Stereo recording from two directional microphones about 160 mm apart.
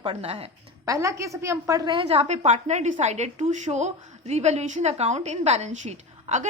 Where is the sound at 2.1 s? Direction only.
45° right (ahead or behind).